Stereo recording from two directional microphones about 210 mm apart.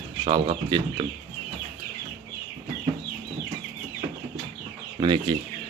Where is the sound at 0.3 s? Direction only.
20° right (ahead or behind).